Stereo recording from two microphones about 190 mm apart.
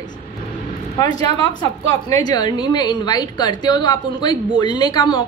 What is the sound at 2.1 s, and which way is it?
A woman's voice, 20° left (ahead or behind).